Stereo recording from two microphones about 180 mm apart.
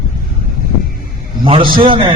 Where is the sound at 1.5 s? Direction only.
30° right (ahead or behind).